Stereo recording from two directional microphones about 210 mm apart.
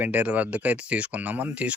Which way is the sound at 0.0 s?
10° right (ahead or behind).